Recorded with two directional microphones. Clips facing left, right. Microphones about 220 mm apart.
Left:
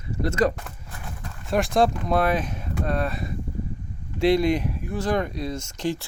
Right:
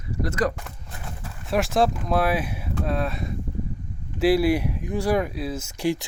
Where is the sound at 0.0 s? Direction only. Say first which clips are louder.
Left 2 dB; 25° left (ahead or behind).